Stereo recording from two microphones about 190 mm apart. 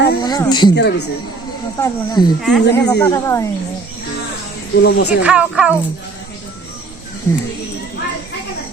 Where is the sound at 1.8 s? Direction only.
20° left (ahead or behind).